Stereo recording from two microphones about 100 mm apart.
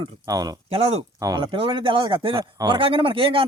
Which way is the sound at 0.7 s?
75° right (ahead or behind).